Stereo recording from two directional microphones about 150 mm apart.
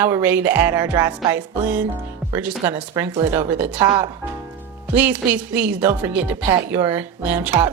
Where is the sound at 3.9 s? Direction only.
30° right (ahead or behind).